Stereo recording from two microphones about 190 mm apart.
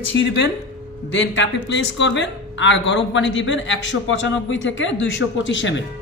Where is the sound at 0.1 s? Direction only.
65° left (ahead or behind).